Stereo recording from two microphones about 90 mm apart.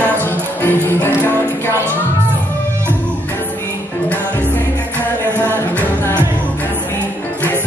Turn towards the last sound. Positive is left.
turn(degrees=25)  # may be behind; listen again after turning